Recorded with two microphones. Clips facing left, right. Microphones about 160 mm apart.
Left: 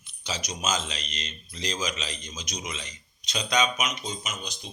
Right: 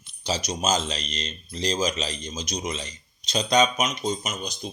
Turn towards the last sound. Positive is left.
turn(degrees=-45)  # may be behind; listen again after turning